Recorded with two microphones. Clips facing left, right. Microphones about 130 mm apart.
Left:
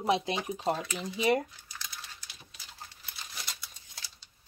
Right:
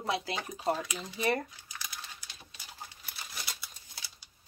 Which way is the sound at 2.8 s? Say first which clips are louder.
Right 1 dB; 5° right (ahead or behind).